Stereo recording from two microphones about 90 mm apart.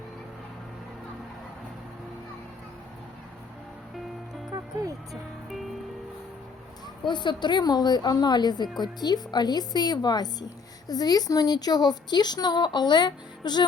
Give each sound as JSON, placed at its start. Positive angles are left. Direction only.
{"t": 4.5, "sound": "music", "side_deg": -40}
{"t": 7.1, "sound": "a woman's voice", "side_deg": 55}